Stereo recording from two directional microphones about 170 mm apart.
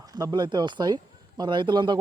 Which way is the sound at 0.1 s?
25° right (ahead or behind).